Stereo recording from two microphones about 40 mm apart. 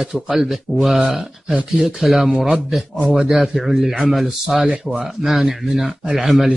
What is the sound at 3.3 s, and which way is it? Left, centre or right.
Speech, centre.